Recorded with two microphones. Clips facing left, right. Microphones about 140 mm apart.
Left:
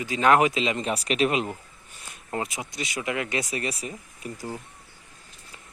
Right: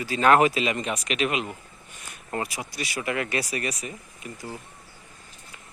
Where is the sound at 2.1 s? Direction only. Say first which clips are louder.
Even; 20° left (ahead or behind).